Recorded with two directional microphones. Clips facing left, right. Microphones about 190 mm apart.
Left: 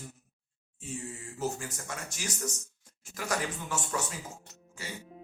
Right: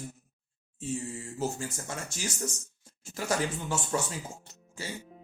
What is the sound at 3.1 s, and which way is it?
Speech, 30° right (ahead or behind).